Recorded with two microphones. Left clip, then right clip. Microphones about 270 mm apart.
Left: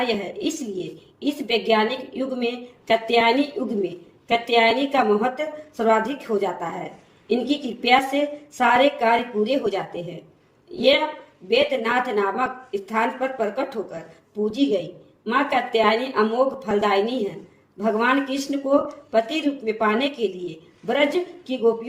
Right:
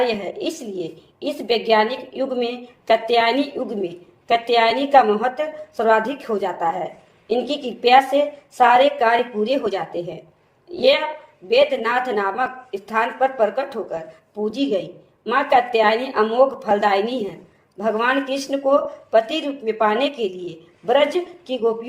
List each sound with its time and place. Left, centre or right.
0.0 s speech: right